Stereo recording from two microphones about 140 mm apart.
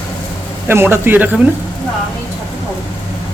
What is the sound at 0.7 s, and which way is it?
Speech, 15° right (ahead or behind).